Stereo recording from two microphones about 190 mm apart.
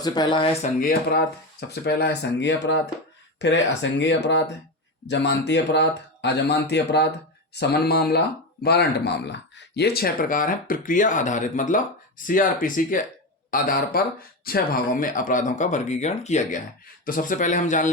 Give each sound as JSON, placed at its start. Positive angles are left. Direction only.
{"t": 0.0, "sound": "speech", "side_deg": 20}
{"t": 0.6, "sound": "speech", "side_deg": 50}